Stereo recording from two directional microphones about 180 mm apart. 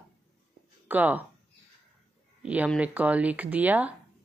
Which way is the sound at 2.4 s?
10° right (ahead or behind).